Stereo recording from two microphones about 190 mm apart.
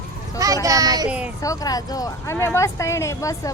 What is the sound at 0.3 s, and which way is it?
Speech, 20° right (ahead or behind).